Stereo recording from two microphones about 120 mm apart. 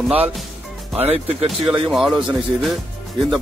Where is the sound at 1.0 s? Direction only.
60° right (ahead or behind).